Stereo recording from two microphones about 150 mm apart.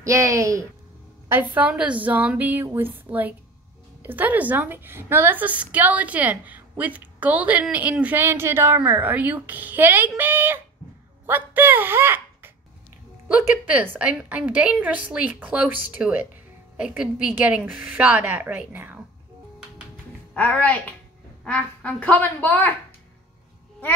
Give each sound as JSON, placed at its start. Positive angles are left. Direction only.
{"t": 0.0, "sound": "a woman's voice", "side_deg": -20}
{"t": 20.3, "sound": "speech", "side_deg": 10}